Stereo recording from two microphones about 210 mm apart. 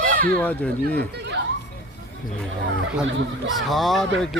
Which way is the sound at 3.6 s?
Centre (ahead or behind).